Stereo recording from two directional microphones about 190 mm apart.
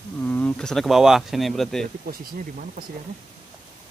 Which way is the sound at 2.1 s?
50° right (ahead or behind).